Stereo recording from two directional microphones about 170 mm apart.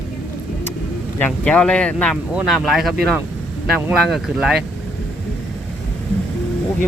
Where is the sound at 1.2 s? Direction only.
5° left (ahead or behind).